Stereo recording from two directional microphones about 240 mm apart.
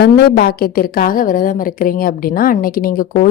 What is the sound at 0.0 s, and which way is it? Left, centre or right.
A woman's voice, left.